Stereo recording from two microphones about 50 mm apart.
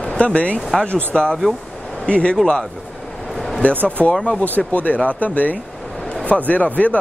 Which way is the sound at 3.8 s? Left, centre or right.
Left.